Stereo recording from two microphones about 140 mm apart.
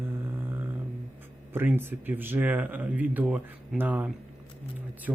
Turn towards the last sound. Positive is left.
turn(degrees=-10)  # may be behind; listen again after turning